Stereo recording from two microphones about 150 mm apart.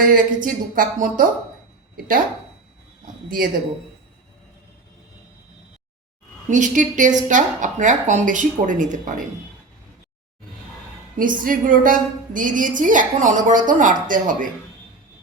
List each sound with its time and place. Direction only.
0.0 s a woman's voice: 65° right (ahead or behind)
6.5 s a woman's voice: 55° right (ahead or behind)
11.2 s a woman's voice: 65° right (ahead or behind)